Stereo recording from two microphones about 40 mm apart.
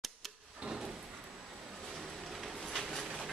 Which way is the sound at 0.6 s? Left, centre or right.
Centre.